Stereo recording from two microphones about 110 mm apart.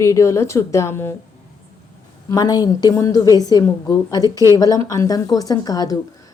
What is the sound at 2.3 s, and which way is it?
Speech, 35° left (ahead or behind).